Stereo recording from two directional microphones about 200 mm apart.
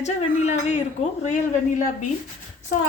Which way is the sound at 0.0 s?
35° left (ahead or behind).